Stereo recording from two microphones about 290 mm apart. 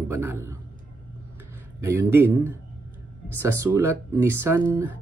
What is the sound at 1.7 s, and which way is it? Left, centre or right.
Speech, centre.